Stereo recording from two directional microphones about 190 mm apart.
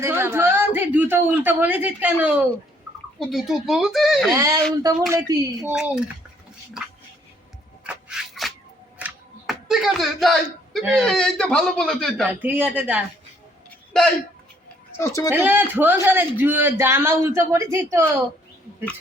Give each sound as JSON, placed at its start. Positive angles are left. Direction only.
{"t": 0.0, "sound": "a man's voice", "side_deg": -15}
{"t": 4.3, "sound": "speech", "side_deg": -20}
{"t": 5.7, "sound": "a man's voice", "side_deg": -5}
{"t": 7.9, "sound": "rub", "side_deg": 0}
{"t": 9.0, "sound": "a sound", "side_deg": -5}
{"t": 10.9, "sound": "a man's voice", "side_deg": 0}
{"t": 12.3, "sound": "speech", "side_deg": -10}
{"t": 13.7, "sound": "a sound", "side_deg": 5}
{"t": 14.9, "sound": "speech", "side_deg": 15}
{"t": 15.3, "sound": "speech", "side_deg": -10}